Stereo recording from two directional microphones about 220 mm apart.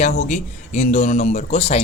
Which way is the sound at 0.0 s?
30° left (ahead or behind).